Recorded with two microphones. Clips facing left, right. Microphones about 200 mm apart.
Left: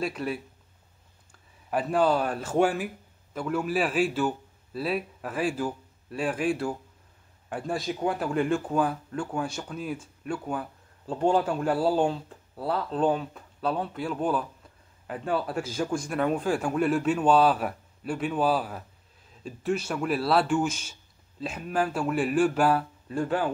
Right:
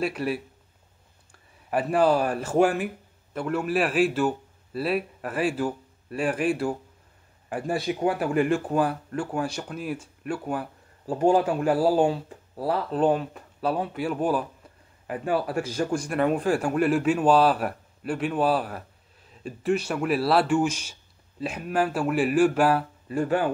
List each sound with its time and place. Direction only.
0.0 s speech: 5° right (ahead or behind)
1.7 s a man's voice: 5° right (ahead or behind)
19.9 s speech: 5° right (ahead or behind)